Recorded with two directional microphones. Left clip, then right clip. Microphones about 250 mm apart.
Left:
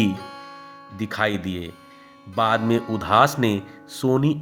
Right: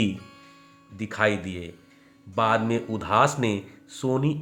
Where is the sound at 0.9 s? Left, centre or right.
Centre.